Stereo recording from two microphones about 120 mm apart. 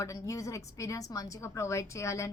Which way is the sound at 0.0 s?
25° left (ahead or behind).